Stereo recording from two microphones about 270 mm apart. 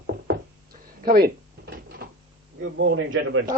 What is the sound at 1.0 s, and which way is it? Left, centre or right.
Drawer open or close, right.